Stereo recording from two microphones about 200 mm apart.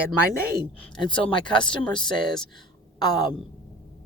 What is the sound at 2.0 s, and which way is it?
Speech, 5° left (ahead or behind).